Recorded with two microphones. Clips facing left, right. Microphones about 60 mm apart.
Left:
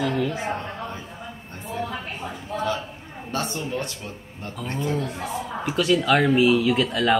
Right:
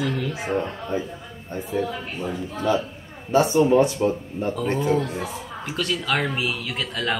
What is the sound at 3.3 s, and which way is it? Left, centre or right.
A man's voice, centre.